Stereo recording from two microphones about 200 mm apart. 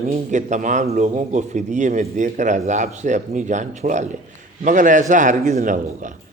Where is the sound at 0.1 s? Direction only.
35° right (ahead or behind).